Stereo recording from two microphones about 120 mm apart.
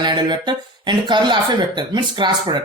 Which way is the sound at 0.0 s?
40° right (ahead or behind).